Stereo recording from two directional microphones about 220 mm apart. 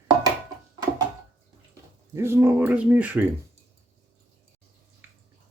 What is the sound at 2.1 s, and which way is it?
Dog, 10° right (ahead or behind).